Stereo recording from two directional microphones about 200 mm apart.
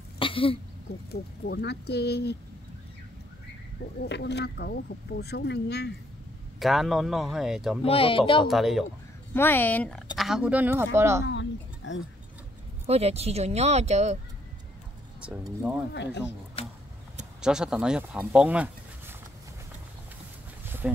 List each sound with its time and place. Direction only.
0.2 s throat clearing: 25° left (ahead or behind)
1.5 s speech: 55° left (ahead or behind)
4.0 s speech: 55° left (ahead or behind)
6.6 s speech: centre (ahead or behind)
7.8 s speech: 30° left (ahead or behind)
8.5 s speech: centre (ahead or behind)
9.3 s speech: 10° left (ahead or behind); by 11.2 s 15° right (ahead or behind)
11.2 s a sound: 65° left (ahead or behind)
12.8 s speech: 30° right (ahead or behind)
15.9 s speech: 60° left (ahead or behind)
17.4 s speech: 5° right (ahead or behind)
20.6 s a sound: 10° right (ahead or behind)